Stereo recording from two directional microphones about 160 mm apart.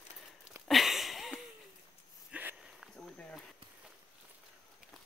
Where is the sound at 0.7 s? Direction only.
Centre (ahead or behind).